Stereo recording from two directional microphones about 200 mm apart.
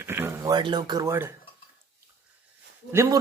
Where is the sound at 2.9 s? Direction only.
15° right (ahead or behind).